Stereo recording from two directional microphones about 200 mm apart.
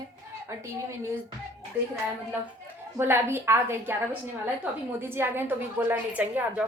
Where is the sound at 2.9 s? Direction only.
10° right (ahead or behind).